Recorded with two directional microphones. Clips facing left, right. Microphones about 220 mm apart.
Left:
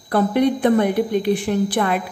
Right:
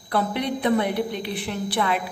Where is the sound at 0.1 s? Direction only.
45° left (ahead or behind).